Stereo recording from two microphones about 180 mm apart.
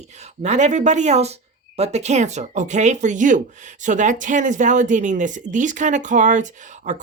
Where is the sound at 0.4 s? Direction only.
40° right (ahead or behind).